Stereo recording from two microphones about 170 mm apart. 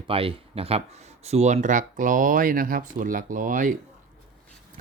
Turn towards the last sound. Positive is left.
turn(degrees=-55)  # may be behind; listen again after turning